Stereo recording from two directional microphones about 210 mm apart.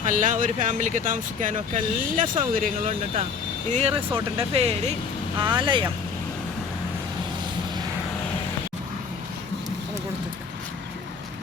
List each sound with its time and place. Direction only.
0.0 s speech: 40° right (ahead or behind); by 5.9 s 25° right (ahead or behind)